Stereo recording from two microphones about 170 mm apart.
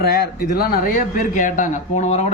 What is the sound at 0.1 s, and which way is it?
A man's voice, 65° left (ahead or behind).